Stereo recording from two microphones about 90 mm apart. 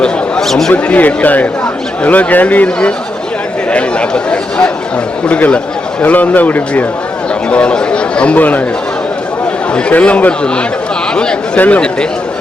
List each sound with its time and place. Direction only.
0.0 s a sound: 5° left (ahead or behind)
0.7 s speech: 15° left (ahead or behind)
9.7 s speech: 15° left (ahead or behind)